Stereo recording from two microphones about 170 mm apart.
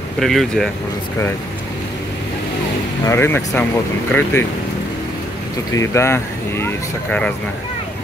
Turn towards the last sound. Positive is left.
turn(degrees=10)  # may be behind; listen again after turning